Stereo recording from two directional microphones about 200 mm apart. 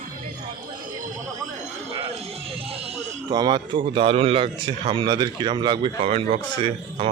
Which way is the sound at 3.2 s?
20° right (ahead or behind).